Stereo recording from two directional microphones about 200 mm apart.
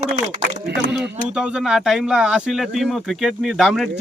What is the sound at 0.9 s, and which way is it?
Speech, 5° right (ahead or behind).